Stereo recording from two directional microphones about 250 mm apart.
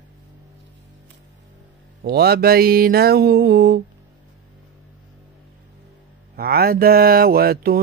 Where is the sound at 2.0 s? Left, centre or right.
Right.